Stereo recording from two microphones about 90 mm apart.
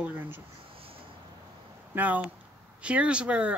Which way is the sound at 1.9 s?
15° right (ahead or behind).